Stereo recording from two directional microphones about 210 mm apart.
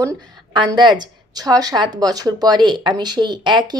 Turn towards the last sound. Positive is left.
turn(degrees=-20)  # may be behind; listen again after turning